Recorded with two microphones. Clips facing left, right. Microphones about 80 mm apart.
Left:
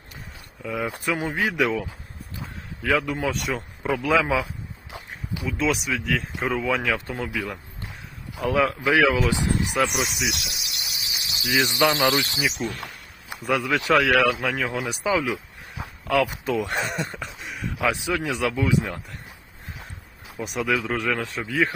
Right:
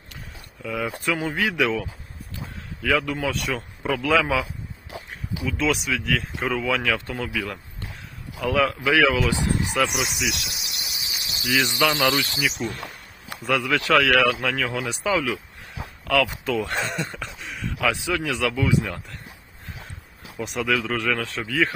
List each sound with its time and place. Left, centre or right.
0.6 s speech: centre
2.9 s speech: centre
5.5 s speech: centre
8.4 s speech: left
9.5 s speech: right
9.7 s speech: left
10.9 s cricket: right
11.4 s speech: left
13.4 s speech: centre
20.4 s speech: centre
20.7 s speech: centre